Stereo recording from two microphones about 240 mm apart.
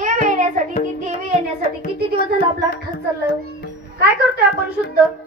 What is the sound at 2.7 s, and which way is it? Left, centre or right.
Speech, left.